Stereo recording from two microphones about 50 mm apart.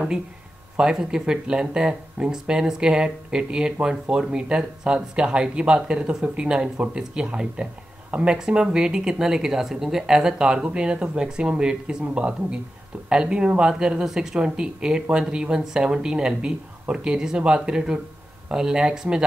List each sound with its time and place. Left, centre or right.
0.7 s speech: centre